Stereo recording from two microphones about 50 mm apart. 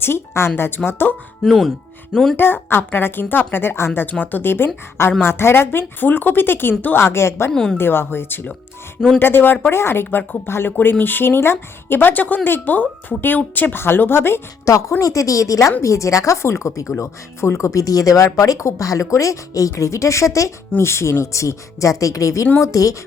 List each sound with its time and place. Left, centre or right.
0.0 s speech: left
1.5 s a woman's voice: centre
2.3 s speech: left
4.2 s speech: left
7.5 s a woman's voice: centre
7.8 s a woman's voice: left
13.8 s speech: left
14.6 s a woman's voice: left
17.0 s a woman's voice: left